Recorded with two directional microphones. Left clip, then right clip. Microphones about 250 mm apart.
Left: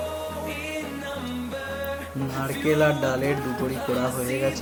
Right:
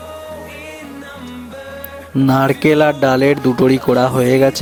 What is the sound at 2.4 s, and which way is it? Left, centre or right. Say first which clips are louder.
Speech: right 8 dB; right.